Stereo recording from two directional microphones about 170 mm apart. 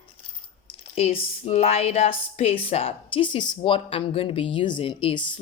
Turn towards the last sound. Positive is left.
turn(degrees=30)  # may be behind; listen again after turning